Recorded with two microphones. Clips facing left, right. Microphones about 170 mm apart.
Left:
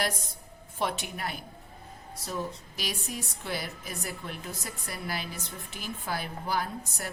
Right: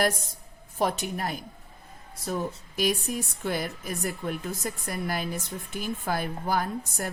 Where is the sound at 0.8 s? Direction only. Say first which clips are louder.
Right 5 dB; 40° right (ahead or behind).